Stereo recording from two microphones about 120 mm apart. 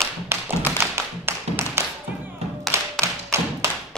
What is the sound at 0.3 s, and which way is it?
Tap, 20° right (ahead or behind).